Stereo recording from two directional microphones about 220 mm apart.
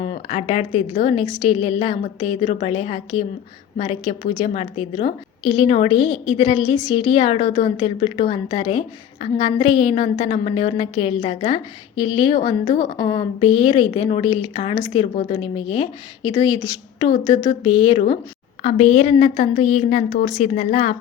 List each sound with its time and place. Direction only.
0.0 s a woman's voice: 25° left (ahead or behind)
17.1 s a woman's voice: 30° left (ahead or behind)